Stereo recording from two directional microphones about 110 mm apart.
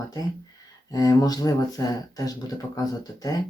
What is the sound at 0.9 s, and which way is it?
Speech, 35° left (ahead or behind).